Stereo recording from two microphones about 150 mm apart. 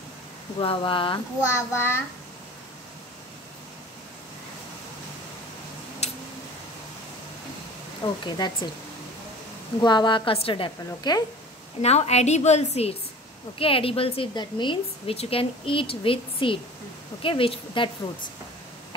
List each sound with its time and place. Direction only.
0.6 s a woman's voice: 35° left (ahead or behind)
1.7 s a child's voice: 15° left (ahead or behind)
6.0 s tick-tock: 45° left (ahead or behind)
8.0 s speech: 30° left (ahead or behind)
9.8 s a woman's voice: 30° left (ahead or behind)
11.8 s a woman's voice: 45° left (ahead or behind)